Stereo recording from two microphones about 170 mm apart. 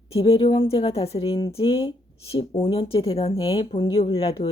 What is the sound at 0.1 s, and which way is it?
Speech, 35° left (ahead or behind).